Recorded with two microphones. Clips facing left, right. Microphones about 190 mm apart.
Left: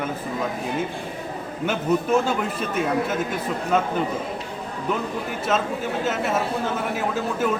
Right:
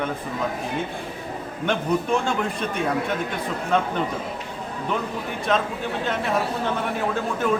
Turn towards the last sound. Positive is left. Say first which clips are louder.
# left 1 dB
turn(degrees=5)  # may be behind; listen again after turning